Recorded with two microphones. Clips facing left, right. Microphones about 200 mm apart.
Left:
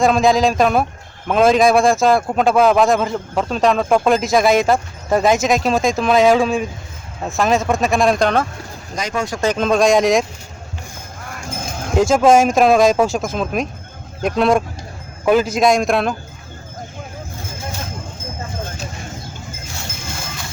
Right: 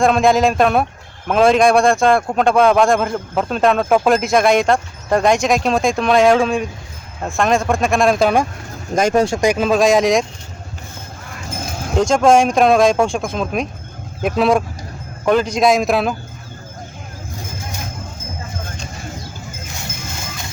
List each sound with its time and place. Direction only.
0.0 s speech: centre (ahead or behind)
9.0 s speech: 50° right (ahead or behind)
9.4 s speech: 10° right (ahead or behind)
11.9 s speech: 5° left (ahead or behind)